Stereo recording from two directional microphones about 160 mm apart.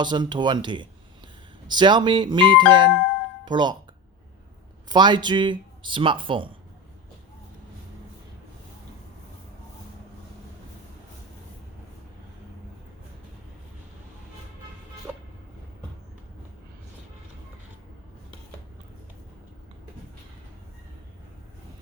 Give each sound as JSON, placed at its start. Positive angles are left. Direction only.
{"t": 0.0, "sound": "speech", "side_deg": -25}
{"t": 4.9, "sound": "speech", "side_deg": -25}
{"t": 15.1, "sound": "vehicle", "side_deg": -10}